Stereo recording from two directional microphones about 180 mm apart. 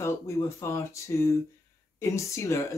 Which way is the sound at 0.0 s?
15° left (ahead or behind).